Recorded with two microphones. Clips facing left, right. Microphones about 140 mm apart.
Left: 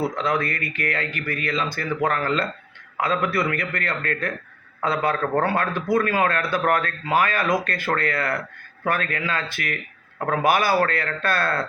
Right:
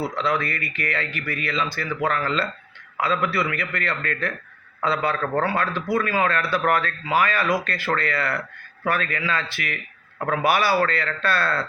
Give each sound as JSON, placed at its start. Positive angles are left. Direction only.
{"t": 0.2, "sound": "speech", "side_deg": 50}